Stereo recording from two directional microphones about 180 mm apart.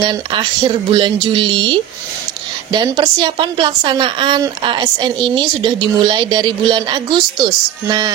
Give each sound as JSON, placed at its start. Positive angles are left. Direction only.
{"t": 0.0, "sound": "a woman's voice", "side_deg": -25}